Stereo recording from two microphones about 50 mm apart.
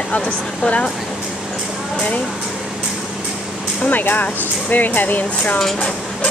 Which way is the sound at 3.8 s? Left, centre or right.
Left.